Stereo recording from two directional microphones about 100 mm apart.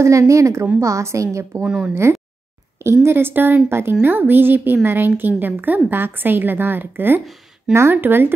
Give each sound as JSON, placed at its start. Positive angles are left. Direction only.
{"t": 0.0, "sound": "a woman's voice", "side_deg": -30}
{"t": 1.6, "sound": "speech", "side_deg": -10}
{"t": 2.8, "sound": "a woman's voice", "side_deg": -25}